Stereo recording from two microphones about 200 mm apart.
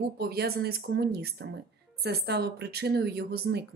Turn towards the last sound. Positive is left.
turn(degrees=-55)  # may be behind; listen again after turning